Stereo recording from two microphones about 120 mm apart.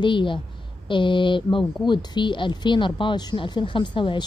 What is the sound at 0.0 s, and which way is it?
A woman's voice, 45° left (ahead or behind).